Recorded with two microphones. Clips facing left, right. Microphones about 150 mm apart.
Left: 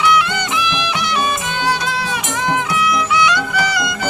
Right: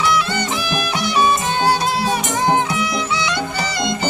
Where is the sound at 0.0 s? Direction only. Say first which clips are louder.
Left 2 dB; 35° right (ahead or behind).